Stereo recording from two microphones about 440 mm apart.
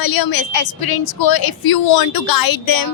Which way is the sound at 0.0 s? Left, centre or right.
Left.